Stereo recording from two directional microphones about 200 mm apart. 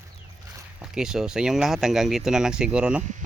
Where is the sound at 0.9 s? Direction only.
5° right (ahead or behind).